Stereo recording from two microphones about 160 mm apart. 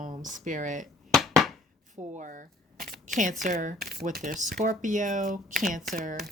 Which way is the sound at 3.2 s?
55° right (ahead or behind).